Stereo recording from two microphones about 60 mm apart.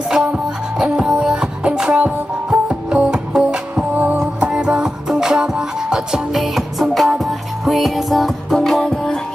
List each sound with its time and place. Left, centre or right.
0.1 s music: centre
3.9 s music: right
4.4 s music: centre